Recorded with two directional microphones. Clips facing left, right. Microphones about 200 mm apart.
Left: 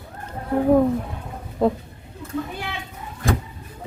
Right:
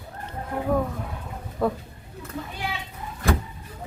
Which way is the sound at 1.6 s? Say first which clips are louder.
Left 5 dB; 20° left (ahead or behind).